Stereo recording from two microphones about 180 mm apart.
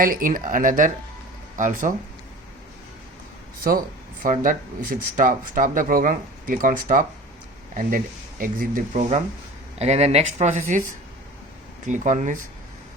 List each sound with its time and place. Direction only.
0.0 s speech: 50° right (ahead or behind)
3.6 s speech: 55° right (ahead or behind)
9.7 s speech: 35° right (ahead or behind)
11.9 s speech: 45° right (ahead or behind)